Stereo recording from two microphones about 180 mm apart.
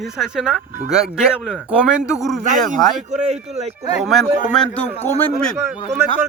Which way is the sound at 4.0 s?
Centre (ahead or behind).